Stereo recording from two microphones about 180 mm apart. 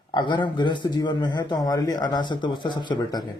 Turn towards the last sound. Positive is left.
turn(degrees=25)  # may be behind; listen again after turning